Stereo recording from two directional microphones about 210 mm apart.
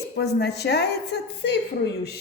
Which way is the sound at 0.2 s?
50° left (ahead or behind).